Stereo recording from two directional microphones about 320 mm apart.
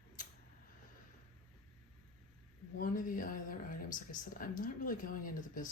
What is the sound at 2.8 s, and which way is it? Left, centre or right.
Speech, left.